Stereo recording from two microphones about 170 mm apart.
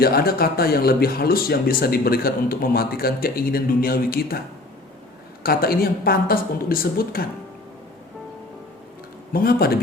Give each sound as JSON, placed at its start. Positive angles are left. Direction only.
{"t": 0.0, "sound": "speech", "side_deg": 65}
{"t": 5.4, "sound": "speech", "side_deg": 60}
{"t": 9.3, "sound": "speech", "side_deg": 65}